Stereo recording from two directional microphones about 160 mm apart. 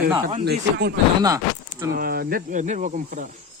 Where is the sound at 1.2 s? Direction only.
20° right (ahead or behind).